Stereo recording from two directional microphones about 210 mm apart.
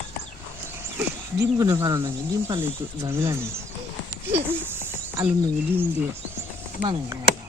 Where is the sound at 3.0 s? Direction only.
10° right (ahead or behind).